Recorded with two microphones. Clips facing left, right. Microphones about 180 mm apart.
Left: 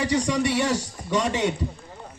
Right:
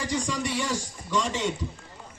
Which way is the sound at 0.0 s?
70° left (ahead or behind).